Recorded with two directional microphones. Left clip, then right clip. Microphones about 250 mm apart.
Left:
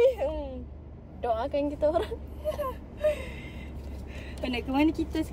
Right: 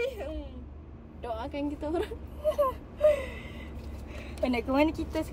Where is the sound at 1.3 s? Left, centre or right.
Left.